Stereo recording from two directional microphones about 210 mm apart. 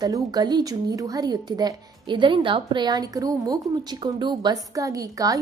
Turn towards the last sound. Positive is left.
turn(degrees=-15)  # may be behind; listen again after turning